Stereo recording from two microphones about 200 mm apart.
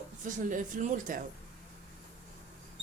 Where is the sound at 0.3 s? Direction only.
40° right (ahead or behind).